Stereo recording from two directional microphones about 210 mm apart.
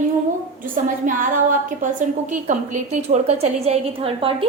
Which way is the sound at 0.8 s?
40° right (ahead or behind).